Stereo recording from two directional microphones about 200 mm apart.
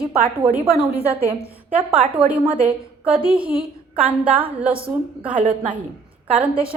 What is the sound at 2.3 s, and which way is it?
A woman's voice, 5° right (ahead or behind).